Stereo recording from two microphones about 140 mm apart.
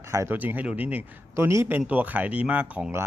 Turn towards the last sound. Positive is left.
turn(degrees=-15)  # may be behind; listen again after turning